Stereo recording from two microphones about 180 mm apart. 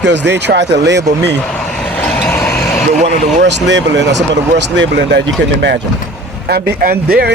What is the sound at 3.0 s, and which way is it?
Speech, 75° right (ahead or behind).